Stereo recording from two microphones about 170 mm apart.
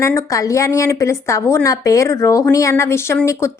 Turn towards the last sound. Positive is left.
turn(degrees=15)  # may be behind; listen again after turning